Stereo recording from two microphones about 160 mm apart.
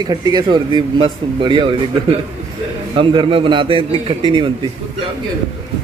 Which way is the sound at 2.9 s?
30° right (ahead or behind).